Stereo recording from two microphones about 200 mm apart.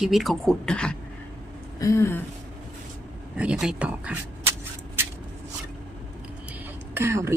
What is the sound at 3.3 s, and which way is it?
Speech, 5° right (ahead or behind).